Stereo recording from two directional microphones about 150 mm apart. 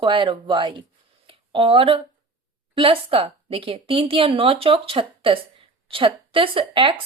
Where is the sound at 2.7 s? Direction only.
35° right (ahead or behind).